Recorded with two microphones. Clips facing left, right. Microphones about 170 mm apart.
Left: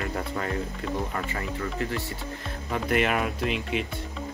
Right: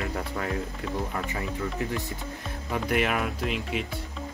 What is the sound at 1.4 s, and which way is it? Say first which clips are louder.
Speech: even; 15° right (ahead or behind).